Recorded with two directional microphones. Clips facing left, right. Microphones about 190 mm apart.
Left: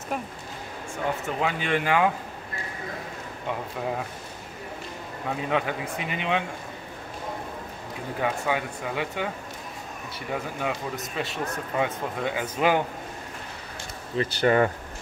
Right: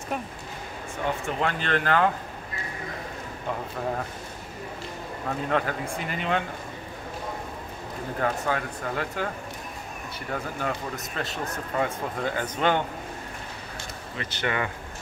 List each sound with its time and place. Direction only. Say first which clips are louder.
1.2 s speech: even; 5° left (ahead or behind)
5.3 s speech: even; 5° left (ahead or behind)
8.2 s speech: even; 5° left (ahead or behind)
10.3 s speech: left 1 dB; 5° left (ahead or behind)
14.1 s speech: left 8 dB; 35° left (ahead or behind)